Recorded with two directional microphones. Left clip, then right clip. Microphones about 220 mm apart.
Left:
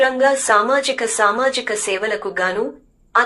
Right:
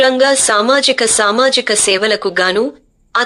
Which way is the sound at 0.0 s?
45° right (ahead or behind).